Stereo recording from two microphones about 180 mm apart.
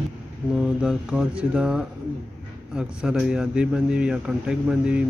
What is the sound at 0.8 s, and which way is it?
Speech, 5° right (ahead or behind).